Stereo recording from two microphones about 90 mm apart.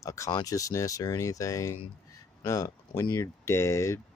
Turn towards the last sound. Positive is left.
turn(degrees=35)  # may be behind; listen again after turning